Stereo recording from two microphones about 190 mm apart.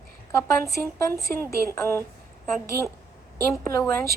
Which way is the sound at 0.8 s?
15° left (ahead or behind).